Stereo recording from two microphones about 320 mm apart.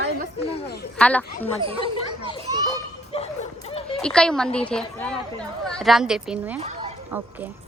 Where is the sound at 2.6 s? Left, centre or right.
Centre.